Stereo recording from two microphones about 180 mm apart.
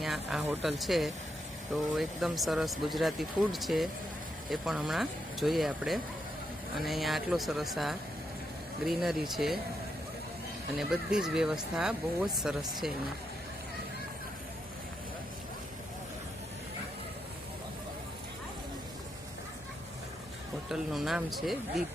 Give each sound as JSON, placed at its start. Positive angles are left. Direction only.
{"t": 0.0, "sound": "speech", "side_deg": 0}
{"t": 10.8, "sound": "speech", "side_deg": -5}
{"t": 20.7, "sound": "speech", "side_deg": 0}